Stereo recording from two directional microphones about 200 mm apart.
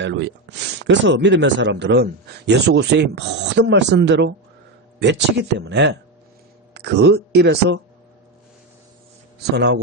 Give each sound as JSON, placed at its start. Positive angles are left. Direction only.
{"t": 0.0, "sound": "speech", "side_deg": -60}
{"t": 9.6, "sound": "speech", "side_deg": -55}